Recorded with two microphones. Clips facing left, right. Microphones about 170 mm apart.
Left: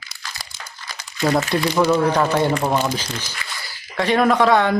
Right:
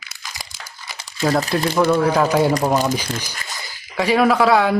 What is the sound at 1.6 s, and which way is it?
Speech, 5° left (ahead or behind).